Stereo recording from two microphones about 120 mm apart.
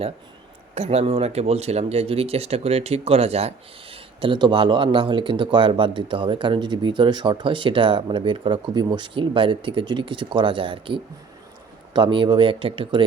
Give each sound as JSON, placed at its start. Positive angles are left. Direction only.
{"t": 0.7, "sound": "speech", "side_deg": -60}